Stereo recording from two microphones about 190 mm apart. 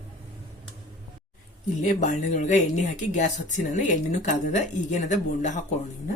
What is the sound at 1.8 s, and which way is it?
Speech, 40° left (ahead or behind).